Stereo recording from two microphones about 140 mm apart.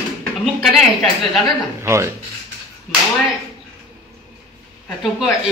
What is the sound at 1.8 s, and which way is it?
Speech, 20° right (ahead or behind).